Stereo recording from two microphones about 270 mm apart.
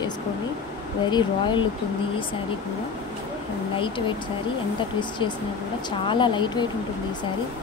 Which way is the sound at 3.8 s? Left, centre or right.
Centre.